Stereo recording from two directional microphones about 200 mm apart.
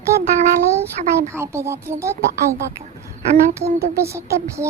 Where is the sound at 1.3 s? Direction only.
15° right (ahead or behind).